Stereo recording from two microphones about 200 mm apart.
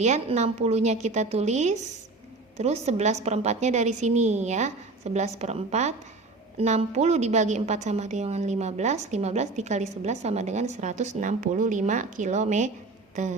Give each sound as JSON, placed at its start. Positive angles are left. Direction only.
{"t": 0.0, "sound": "a woman's voice", "side_deg": -35}